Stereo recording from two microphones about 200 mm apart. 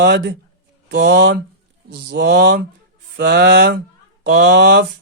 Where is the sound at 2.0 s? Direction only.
55° right (ahead or behind).